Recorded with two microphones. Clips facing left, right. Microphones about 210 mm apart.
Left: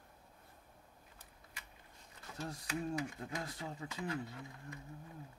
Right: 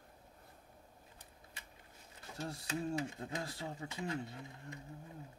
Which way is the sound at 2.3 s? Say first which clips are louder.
Right 1 dB; 30° right (ahead or behind).